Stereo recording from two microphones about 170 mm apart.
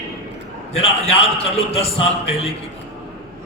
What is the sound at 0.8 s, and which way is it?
A man's voice, 35° left (ahead or behind).